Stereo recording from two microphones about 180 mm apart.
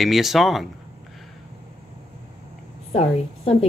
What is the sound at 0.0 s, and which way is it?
Speech, centre (ahead or behind).